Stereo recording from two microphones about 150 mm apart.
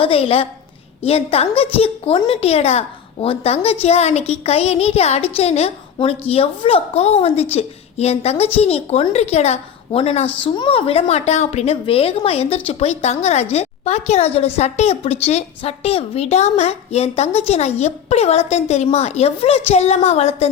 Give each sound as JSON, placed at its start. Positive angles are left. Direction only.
{"t": 0.0, "sound": "a woman's voice", "side_deg": 40}